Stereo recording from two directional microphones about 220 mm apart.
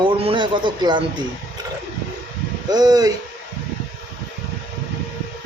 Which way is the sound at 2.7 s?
15° right (ahead or behind).